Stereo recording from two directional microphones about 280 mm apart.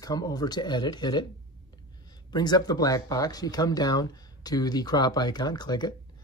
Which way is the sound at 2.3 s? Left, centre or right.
Centre.